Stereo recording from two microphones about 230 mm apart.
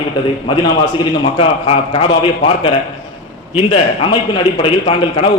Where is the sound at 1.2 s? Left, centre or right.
Left.